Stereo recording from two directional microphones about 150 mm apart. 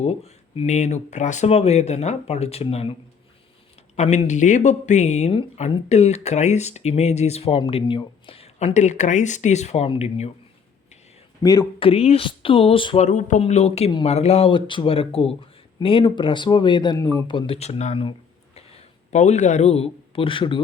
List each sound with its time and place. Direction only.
0.0 s speech: 45° left (ahead or behind)
3.9 s speech: 50° left (ahead or behind)
11.4 s speech: 25° left (ahead or behind)
11.8 s speech: 40° left (ahead or behind)
13.1 s speech: 55° left (ahead or behind)
13.4 s speech: 45° left (ahead or behind)